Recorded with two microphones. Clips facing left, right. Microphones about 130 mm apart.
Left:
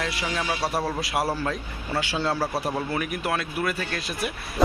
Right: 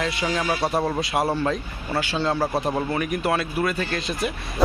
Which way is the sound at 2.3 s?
20° right (ahead or behind).